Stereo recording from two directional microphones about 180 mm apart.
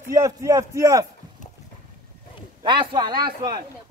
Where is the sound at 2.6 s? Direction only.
25° right (ahead or behind).